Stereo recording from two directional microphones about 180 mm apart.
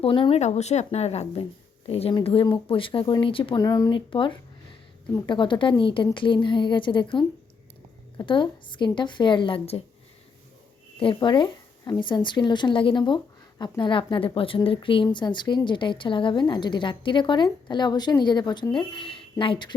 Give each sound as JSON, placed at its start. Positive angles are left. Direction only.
{"t": 0.0, "sound": "speech", "side_deg": 30}
{"t": 11.0, "sound": "speech", "side_deg": 25}